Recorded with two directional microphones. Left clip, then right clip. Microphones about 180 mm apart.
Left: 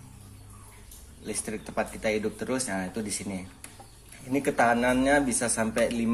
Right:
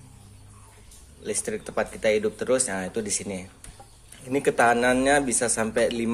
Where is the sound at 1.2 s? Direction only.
20° right (ahead or behind).